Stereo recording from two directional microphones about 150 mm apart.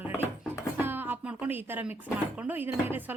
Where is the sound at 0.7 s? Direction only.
15° right (ahead or behind).